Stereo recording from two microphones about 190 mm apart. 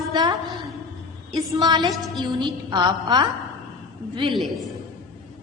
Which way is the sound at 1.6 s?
20° right (ahead or behind).